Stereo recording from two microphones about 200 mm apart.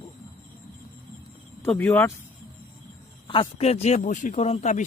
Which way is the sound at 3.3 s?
30° left (ahead or behind).